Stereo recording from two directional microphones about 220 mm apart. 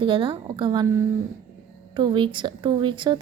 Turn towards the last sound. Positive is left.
turn(degrees=-20)  # may be behind; listen again after turning